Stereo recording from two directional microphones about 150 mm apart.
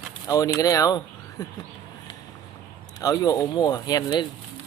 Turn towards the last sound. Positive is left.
turn(degrees=30)  # may be behind; listen again after turning